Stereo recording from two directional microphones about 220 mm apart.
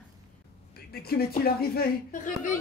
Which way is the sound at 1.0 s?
45° left (ahead or behind).